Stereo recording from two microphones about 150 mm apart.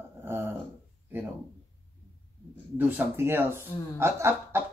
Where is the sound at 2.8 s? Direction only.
15° right (ahead or behind).